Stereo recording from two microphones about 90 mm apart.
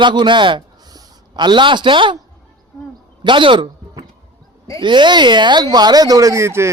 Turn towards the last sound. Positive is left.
turn(degrees=-30)  # may be behind; listen again after turning